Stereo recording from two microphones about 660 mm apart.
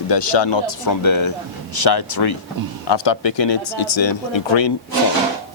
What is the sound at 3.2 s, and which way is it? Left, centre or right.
Speech, left.